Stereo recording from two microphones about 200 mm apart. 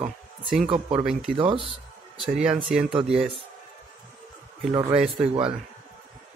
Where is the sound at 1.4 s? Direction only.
25° right (ahead or behind).